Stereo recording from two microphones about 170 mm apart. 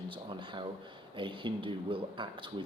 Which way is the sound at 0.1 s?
30° right (ahead or behind).